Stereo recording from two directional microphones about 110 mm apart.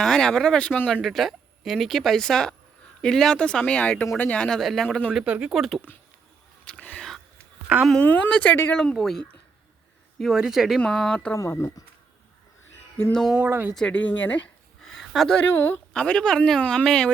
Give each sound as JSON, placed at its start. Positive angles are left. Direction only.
{"t": 0.0, "sound": "speech", "side_deg": 5}
{"t": 1.0, "sound": "speech", "side_deg": 0}
{"t": 5.1, "sound": "speech", "side_deg": -10}
{"t": 6.7, "sound": "a sound", "side_deg": 10}
{"t": 7.9, "sound": "speech", "side_deg": 10}
{"t": 8.8, "sound": "speech", "side_deg": 5}
{"t": 10.8, "sound": "speech", "side_deg": 5}
{"t": 11.3, "sound": "speech", "side_deg": 25}
{"t": 13.1, "sound": "speech", "side_deg": 0}
{"t": 13.4, "sound": "speech", "side_deg": -15}
{"t": 13.7, "sound": "speech", "side_deg": 10}
{"t": 15.4, "sound": "speech", "side_deg": 20}
{"t": 15.9, "sound": "speech", "side_deg": 10}